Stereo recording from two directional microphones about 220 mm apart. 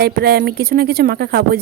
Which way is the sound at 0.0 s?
45° right (ahead or behind).